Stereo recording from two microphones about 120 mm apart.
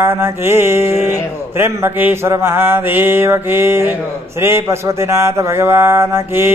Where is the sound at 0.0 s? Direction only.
20° right (ahead or behind).